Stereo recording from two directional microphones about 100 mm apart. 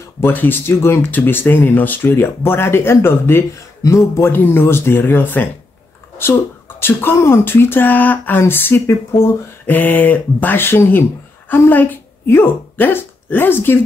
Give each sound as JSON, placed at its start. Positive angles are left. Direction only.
{"t": 0.2, "sound": "speech", "side_deg": 20}
{"t": 6.8, "sound": "speech", "side_deg": 25}